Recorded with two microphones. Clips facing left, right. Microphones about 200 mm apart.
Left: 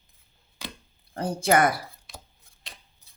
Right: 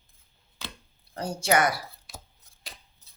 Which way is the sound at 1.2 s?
55° left (ahead or behind).